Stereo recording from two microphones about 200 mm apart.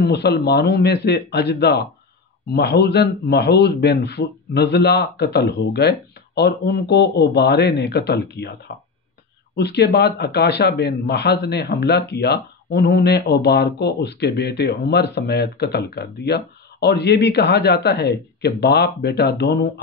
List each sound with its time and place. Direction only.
0.0 s speech: 55° left (ahead or behind)